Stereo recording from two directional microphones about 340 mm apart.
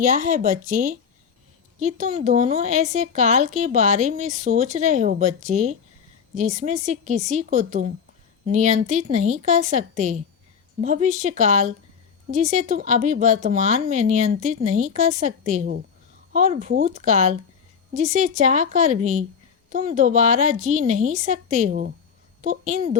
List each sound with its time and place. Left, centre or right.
0.0 s a woman's voice: right